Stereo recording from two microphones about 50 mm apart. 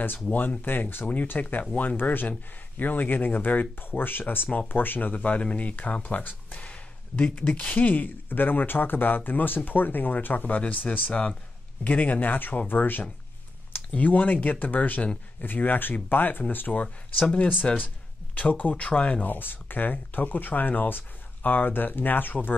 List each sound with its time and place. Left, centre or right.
0.3 s speech: left
5.1 s speech: left
19.2 s speech: left